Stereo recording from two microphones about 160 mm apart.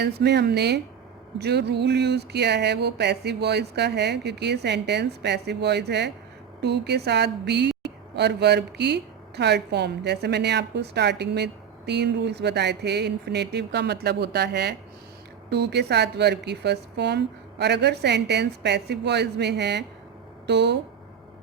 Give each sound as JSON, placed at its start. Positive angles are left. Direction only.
{"t": 0.0, "sound": "speech", "side_deg": -90}